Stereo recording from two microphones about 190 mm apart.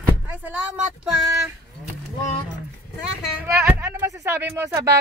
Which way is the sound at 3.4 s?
10° right (ahead or behind).